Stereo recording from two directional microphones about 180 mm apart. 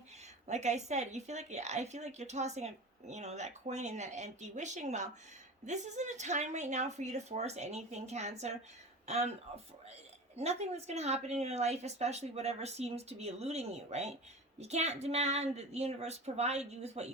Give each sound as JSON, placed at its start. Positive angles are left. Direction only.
{"t": 0.4, "sound": "speech", "side_deg": -40}
{"t": 10.3, "sound": "speech", "side_deg": -35}